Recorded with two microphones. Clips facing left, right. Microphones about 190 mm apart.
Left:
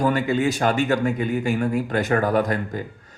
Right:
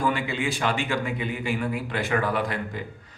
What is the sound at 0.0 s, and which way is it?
Speech, 45° left (ahead or behind).